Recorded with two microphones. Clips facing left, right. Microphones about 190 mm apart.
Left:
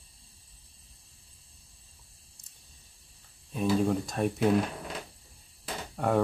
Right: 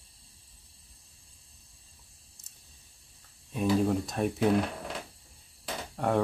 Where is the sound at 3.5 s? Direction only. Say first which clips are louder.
Even; centre (ahead or behind).